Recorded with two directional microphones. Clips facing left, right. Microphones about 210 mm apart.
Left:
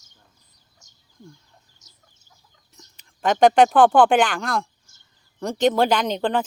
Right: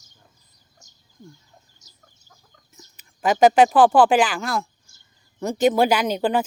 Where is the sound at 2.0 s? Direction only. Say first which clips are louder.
Right 4 dB; 50° right (ahead or behind).